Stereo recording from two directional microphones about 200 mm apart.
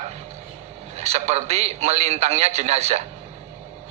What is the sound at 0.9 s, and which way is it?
A man's voice, 30° right (ahead or behind).